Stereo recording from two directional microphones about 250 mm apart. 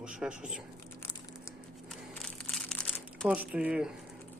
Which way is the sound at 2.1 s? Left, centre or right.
Centre.